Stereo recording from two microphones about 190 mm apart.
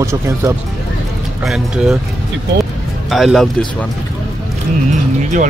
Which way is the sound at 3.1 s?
Centre (ahead or behind).